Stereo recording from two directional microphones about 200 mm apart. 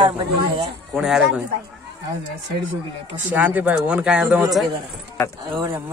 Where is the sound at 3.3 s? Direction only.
5° right (ahead or behind).